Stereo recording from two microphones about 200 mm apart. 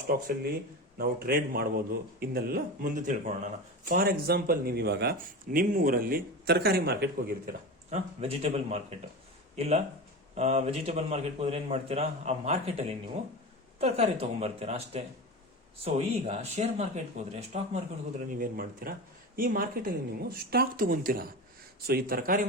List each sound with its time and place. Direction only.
0.9 s a man's voice: 50° right (ahead or behind)
7.9 s a man's voice: 30° right (ahead or behind)
18.3 s a man's voice: 45° right (ahead or behind)